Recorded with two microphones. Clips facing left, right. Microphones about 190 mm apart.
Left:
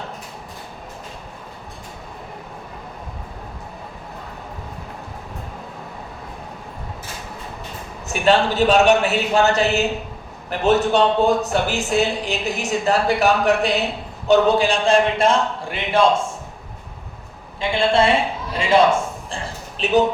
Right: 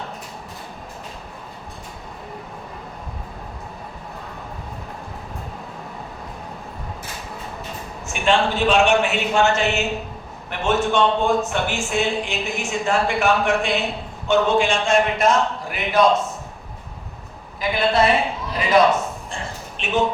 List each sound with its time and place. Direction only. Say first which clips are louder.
8.0 s a man's voice: left 3 dB; 40° left (ahead or behind)
17.6 s a man's voice: left 1 dB; 25° left (ahead or behind)
18.5 s a sound: left 1 dB; 30° left (ahead or behind)
19.8 s speech: left 4 dB; 35° left (ahead or behind)